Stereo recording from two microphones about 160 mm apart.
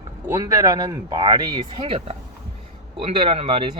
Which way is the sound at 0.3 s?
20° right (ahead or behind).